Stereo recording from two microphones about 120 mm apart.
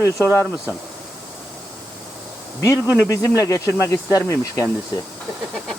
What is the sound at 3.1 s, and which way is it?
Speech, 25° left (ahead or behind).